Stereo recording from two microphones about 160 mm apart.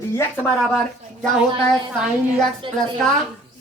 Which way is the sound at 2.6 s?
30° right (ahead or behind).